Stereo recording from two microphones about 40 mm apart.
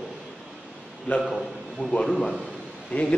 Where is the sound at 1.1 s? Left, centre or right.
Left.